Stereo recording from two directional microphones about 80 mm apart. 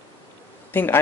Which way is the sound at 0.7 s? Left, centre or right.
Left.